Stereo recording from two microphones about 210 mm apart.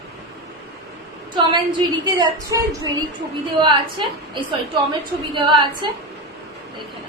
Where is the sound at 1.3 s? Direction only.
20° right (ahead or behind).